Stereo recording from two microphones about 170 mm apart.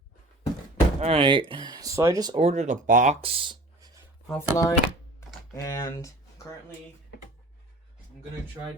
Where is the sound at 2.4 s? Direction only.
40° right (ahead or behind); by 3.9 s 25° right (ahead or behind).